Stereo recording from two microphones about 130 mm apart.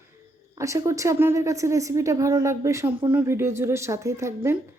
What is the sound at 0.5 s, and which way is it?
Speech, 25° right (ahead or behind).